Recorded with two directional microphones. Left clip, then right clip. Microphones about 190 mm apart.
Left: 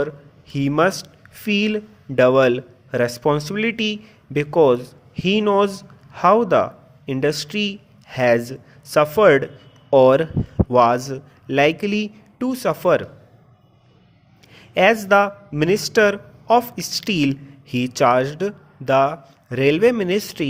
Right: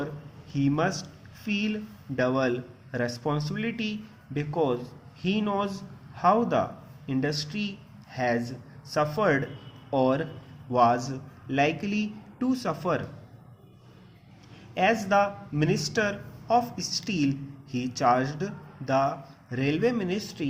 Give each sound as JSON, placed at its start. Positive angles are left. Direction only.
{"t": 0.5, "sound": "speech", "side_deg": 55}
{"t": 14.7, "sound": "speech", "side_deg": 60}